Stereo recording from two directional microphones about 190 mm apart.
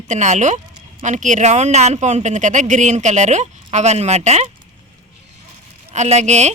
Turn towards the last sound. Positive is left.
turn(degrees=-35)  # may be behind; listen again after turning